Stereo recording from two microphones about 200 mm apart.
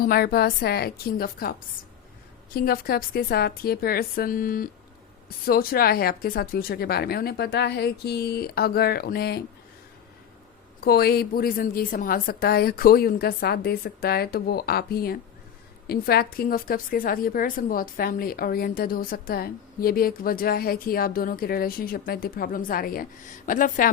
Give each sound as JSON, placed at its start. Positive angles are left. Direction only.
{"t": 0.0, "sound": "a woman's voice", "side_deg": 50}
{"t": 2.6, "sound": "a woman's voice", "side_deg": 45}
{"t": 10.8, "sound": "a woman's voice", "side_deg": 50}